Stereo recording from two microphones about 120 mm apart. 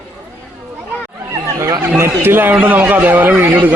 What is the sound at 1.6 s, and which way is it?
Chatter, 25° right (ahead or behind).